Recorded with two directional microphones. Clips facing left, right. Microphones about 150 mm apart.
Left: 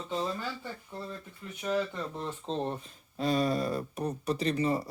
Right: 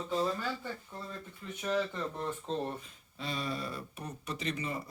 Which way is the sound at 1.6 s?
15° left (ahead or behind).